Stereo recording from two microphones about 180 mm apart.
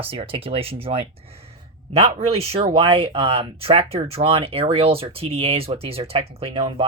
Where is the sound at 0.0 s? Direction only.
30° right (ahead or behind).